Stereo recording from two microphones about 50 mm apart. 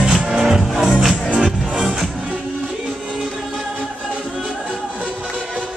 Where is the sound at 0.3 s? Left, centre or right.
Centre.